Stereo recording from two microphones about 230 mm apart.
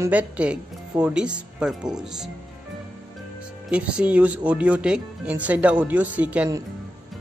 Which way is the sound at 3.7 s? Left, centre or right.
Centre.